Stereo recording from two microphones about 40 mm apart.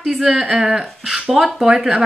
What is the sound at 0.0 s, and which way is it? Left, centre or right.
Speech, centre.